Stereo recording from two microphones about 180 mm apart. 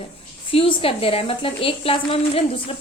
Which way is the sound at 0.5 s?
30° left (ahead or behind).